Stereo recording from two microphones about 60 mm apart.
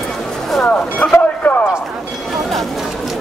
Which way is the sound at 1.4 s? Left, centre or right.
Centre.